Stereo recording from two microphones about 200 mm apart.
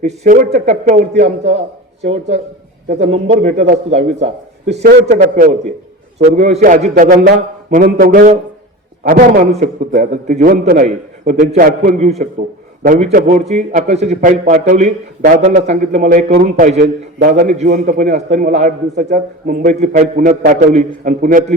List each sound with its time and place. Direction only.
0.0 s a man's voice: 35° right (ahead or behind)